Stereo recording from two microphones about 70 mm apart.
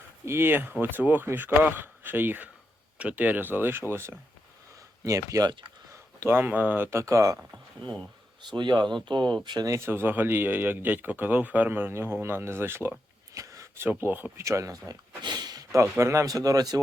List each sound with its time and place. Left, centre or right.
0.3 s speech: right
5.0 s speech: right
6.2 s speech: right
7.0 s speech: right
8.4 s speech: right
9.6 s speech: right
13.3 s a sound: right
14.0 s speech: right
14.3 s speech: right
15.7 s speech: right